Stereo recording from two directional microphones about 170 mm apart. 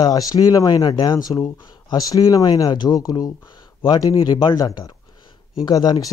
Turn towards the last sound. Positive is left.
turn(degrees=20)  # may be behind; listen again after turning